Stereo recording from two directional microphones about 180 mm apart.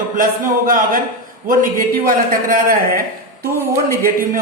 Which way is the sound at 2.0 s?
50° right (ahead or behind).